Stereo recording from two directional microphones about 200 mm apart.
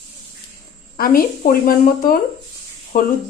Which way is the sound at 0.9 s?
45° left (ahead or behind).